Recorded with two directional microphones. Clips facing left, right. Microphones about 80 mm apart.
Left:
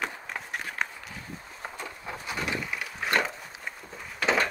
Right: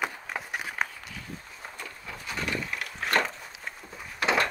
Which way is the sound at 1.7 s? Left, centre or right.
Left.